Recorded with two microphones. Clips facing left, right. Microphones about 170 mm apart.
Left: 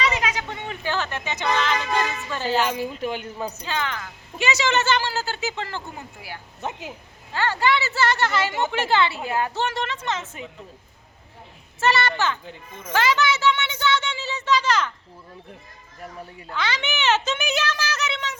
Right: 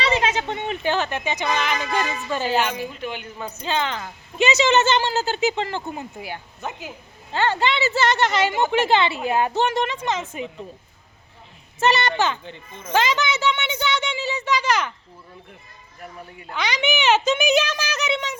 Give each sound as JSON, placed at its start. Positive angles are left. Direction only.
{"t": 0.0, "sound": "speech", "side_deg": -30}
{"t": 3.0, "sound": "speech", "side_deg": 40}
{"t": 3.6, "sound": "speech", "side_deg": -25}
{"t": 6.6, "sound": "speech", "side_deg": 25}
{"t": 7.3, "sound": "speech", "side_deg": -20}
{"t": 11.8, "sound": "speech", "side_deg": -20}
{"t": 12.9, "sound": "a sound", "side_deg": -20}
{"t": 16.5, "sound": "speech", "side_deg": -15}